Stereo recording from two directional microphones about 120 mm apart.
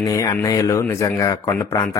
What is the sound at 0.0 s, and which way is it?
Speech, 25° left (ahead or behind).